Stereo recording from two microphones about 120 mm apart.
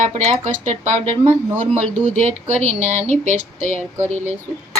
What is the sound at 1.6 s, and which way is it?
Speech, 70° right (ahead or behind).